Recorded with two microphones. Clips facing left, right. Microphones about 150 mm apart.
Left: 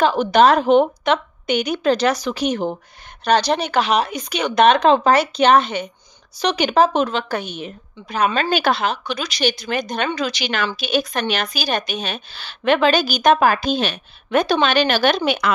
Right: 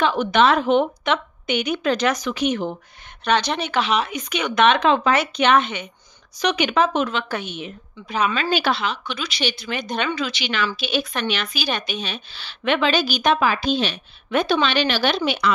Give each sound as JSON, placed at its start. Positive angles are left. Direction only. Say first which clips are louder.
{"t": 0.0, "sound": "a woman's voice", "louder": "left 4 dB", "side_deg": 35}